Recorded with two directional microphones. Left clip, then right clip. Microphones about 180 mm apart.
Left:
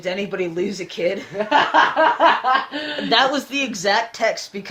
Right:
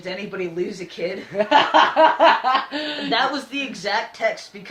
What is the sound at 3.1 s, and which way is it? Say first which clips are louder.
Speech: left 5 dB; 45° left (ahead or behind).